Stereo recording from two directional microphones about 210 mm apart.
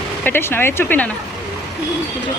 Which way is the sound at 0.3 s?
10° left (ahead or behind).